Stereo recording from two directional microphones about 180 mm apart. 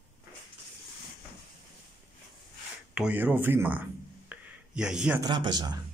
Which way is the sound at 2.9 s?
10° right (ahead or behind).